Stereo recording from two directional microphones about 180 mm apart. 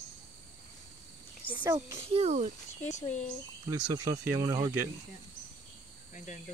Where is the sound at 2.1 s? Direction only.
35° right (ahead or behind).